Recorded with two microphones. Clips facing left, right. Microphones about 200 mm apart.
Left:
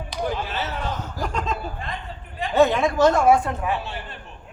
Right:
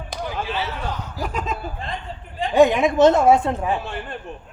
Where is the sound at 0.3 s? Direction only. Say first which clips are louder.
Right 1 dB; 45° left (ahead or behind).